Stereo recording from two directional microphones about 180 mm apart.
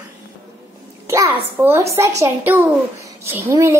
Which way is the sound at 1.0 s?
15° right (ahead or behind).